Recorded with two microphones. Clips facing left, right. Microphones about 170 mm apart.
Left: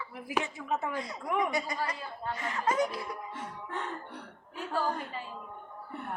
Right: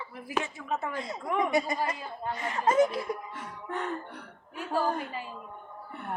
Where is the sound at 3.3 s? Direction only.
30° left (ahead or behind).